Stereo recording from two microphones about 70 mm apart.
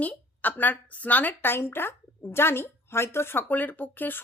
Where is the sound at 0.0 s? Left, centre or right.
Left.